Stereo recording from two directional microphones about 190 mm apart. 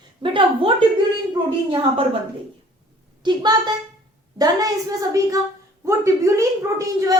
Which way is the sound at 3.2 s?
20° right (ahead or behind).